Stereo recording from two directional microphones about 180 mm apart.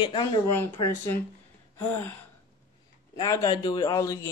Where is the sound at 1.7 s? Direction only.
10° left (ahead or behind).